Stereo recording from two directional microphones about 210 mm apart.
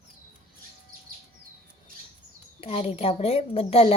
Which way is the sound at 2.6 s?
30° left (ahead or behind).